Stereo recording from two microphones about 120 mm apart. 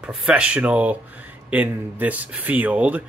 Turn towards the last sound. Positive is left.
turn(degrees=-10)  # may be behind; listen again after turning